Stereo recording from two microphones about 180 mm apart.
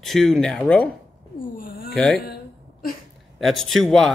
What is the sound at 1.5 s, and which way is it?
Cat, 55° left (ahead or behind).